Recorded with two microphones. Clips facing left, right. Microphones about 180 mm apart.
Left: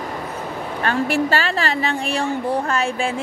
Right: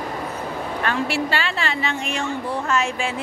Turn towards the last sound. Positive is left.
turn(degrees=30)  # may be behind; listen again after turning